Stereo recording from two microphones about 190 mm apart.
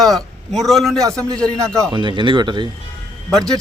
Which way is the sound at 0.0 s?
Centre (ahead or behind).